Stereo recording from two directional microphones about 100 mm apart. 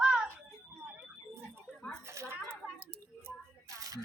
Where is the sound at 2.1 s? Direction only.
30° right (ahead or behind).